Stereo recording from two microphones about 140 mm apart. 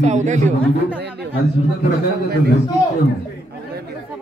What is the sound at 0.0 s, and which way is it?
Speech, 60° right (ahead or behind).